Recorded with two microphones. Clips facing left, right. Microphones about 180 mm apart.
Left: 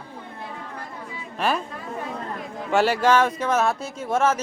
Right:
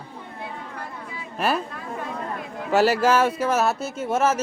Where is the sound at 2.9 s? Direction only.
5° right (ahead or behind).